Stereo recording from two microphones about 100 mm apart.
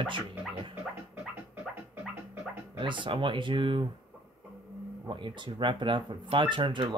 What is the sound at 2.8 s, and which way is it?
Speech, 55° right (ahead or behind).